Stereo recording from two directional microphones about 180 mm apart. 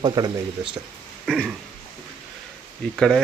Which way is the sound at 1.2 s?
Centre (ahead or behind).